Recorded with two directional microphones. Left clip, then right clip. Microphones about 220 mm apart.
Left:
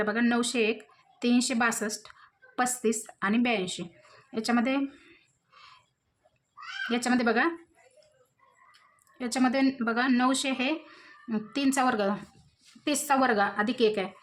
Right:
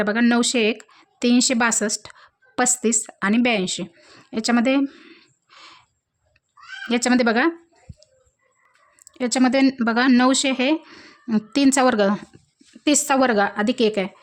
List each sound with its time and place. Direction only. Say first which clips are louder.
0.0 s speech: right 8 dB; 40° right (ahead or behind)
6.8 s speech: right 8 dB; 40° right (ahead or behind)
9.1 s speech: right 8 dB; 40° right (ahead or behind)